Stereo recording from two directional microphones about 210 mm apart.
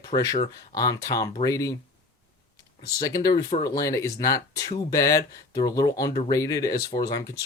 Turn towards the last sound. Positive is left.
turn(degrees=15)  # may be behind; listen again after turning